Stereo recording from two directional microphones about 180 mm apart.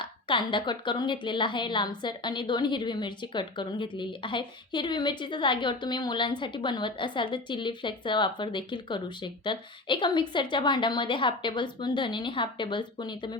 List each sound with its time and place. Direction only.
0.0 s a woman's voice: 25° left (ahead or behind)